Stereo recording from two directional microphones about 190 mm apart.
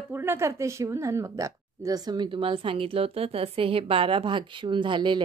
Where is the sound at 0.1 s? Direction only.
10° right (ahead or behind).